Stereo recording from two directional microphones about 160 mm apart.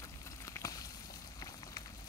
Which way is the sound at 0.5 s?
20° left (ahead or behind).